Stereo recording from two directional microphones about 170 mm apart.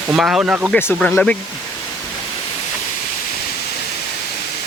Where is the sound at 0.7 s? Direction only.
15° left (ahead or behind).